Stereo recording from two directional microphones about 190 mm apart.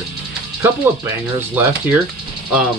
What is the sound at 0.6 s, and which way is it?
Speech, 10° right (ahead or behind).